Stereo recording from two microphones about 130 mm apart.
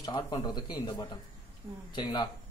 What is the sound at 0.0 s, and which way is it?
A man's voice, 35° left (ahead or behind).